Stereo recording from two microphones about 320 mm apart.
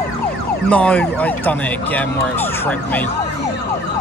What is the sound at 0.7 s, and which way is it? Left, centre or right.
Speech, centre.